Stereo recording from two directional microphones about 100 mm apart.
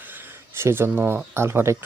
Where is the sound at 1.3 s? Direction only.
25° right (ahead or behind).